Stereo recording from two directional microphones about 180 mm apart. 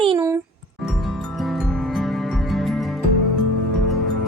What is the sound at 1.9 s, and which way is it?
Music, centre (ahead or behind).